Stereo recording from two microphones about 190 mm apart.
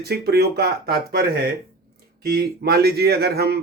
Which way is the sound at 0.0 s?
55° right (ahead or behind).